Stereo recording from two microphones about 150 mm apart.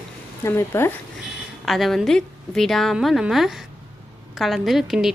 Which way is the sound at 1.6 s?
Centre (ahead or behind).